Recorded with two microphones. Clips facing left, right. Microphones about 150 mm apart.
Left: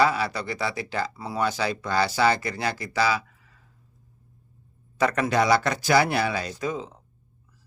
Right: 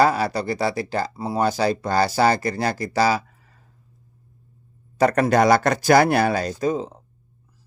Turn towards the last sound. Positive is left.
turn(degrees=-40)  # may be behind; listen again after turning